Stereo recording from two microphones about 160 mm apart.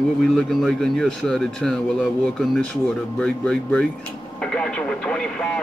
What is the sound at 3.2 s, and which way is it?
A man's voice, 5° left (ahead or behind).